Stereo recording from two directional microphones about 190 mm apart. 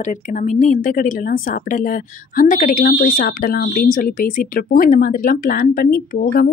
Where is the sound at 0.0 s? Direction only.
40° left (ahead or behind).